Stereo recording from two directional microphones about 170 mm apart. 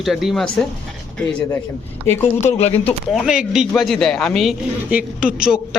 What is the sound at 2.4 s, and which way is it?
Speech, 40° left (ahead or behind).